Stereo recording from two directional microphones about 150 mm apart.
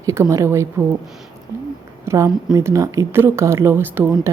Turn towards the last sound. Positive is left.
turn(degrees=-15)  # may be behind; listen again after turning